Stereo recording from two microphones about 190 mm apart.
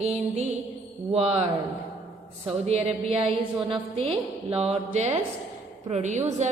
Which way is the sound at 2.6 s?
35° right (ahead or behind).